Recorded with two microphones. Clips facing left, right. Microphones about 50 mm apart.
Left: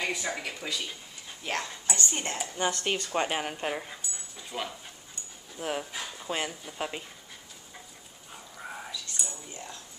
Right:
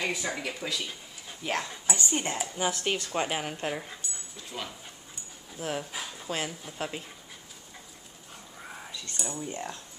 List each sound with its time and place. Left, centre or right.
0.0 s speech: centre
5.9 s speech: centre
6.2 s speech: centre
8.5 s dog: centre
8.9 s a sound: right